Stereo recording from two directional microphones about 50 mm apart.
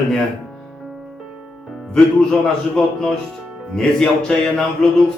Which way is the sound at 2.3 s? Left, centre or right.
Centre.